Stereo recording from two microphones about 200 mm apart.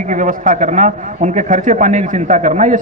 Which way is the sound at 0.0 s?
40° right (ahead or behind).